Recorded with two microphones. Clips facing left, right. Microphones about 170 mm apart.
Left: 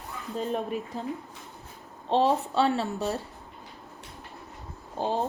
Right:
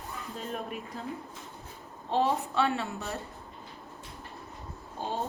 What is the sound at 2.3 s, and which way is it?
Speech, 30° left (ahead or behind).